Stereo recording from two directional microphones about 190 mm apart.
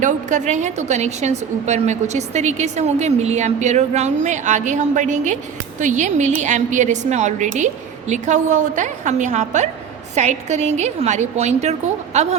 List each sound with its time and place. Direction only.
0.0 s a woman's voice: 40° right (ahead or behind)